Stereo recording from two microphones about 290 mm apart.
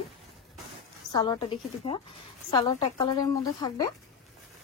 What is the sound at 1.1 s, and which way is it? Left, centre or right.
Speech, centre.